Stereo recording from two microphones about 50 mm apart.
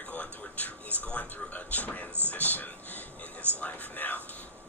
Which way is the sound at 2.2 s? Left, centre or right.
Left.